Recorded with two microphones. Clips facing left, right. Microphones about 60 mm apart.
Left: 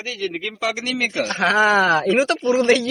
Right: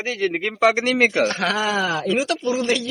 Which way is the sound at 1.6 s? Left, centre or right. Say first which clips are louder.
Left 10 dB; left.